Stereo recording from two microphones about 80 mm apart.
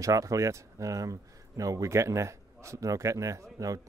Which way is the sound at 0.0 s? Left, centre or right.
Right.